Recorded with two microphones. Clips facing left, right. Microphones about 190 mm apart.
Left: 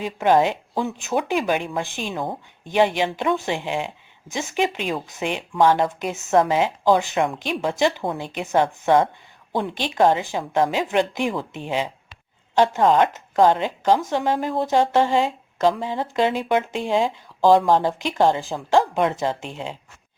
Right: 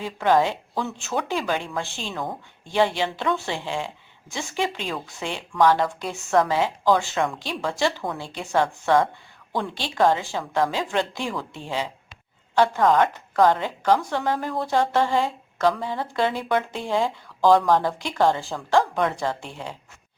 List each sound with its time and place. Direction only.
0.0 s speech: 15° left (ahead or behind)